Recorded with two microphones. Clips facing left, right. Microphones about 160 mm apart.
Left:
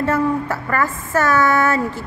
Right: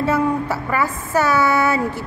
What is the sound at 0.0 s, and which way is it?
A woman's voice, 10° right (ahead or behind).